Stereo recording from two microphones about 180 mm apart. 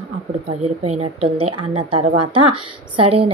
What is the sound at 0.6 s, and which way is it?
Speech, 35° right (ahead or behind).